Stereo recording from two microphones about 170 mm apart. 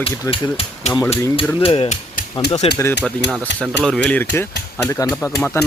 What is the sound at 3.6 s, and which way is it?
Speech, 5° left (ahead or behind).